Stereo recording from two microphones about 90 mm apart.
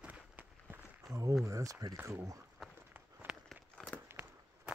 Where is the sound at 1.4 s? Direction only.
35° right (ahead or behind).